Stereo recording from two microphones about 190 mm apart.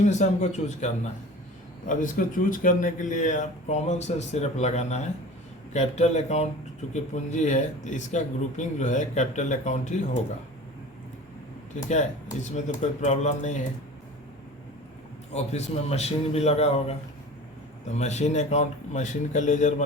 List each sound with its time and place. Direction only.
0.0 s speech: 35° left (ahead or behind)
11.8 s speech: 40° left (ahead or behind)
15.3 s speech: 35° left (ahead or behind)